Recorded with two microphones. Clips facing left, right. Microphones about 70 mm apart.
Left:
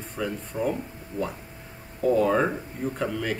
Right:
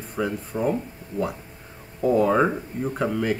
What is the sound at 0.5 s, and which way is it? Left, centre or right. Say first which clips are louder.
Speech: right 2 dB; right.